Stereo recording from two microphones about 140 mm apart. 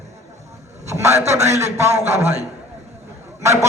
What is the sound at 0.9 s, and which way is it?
A man's voice, 20° right (ahead or behind).